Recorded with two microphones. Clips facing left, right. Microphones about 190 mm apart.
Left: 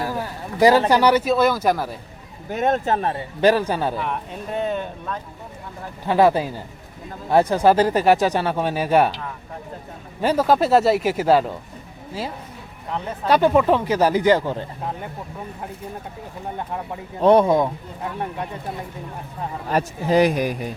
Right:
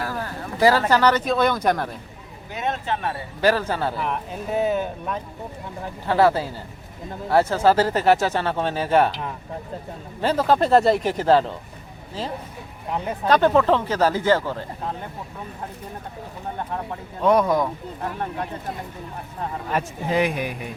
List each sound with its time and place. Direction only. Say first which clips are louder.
0.0 s speech: left 2 dB; 15° left (ahead or behind)
2.5 s speech: left 6 dB; 50° left (ahead or behind)
3.4 s speech: left 3 dB; 15° left (ahead or behind)
4.0 s speech: right 1 dB; centre (ahead or behind)
6.1 s speech: left 2 dB; 15° left (ahead or behind)
10.2 s speech: left 2 dB; 10° left (ahead or behind)
13.2 s speech: left 1 dB; 10° left (ahead or behind)
16.6 s speech: right 1 dB; 10° left (ahead or behind)
17.2 s speech: left 4 dB; 30° left (ahead or behind)
19.7 s speech: left 5 dB; 35° left (ahead or behind)